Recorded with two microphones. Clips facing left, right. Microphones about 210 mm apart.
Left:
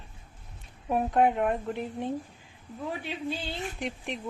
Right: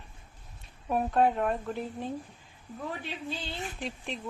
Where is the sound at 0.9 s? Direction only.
20° left (ahead or behind).